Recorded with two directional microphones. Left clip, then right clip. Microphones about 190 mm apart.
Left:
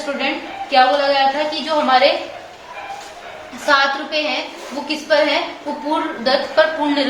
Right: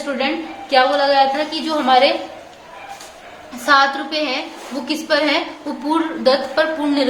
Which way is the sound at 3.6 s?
35° right (ahead or behind).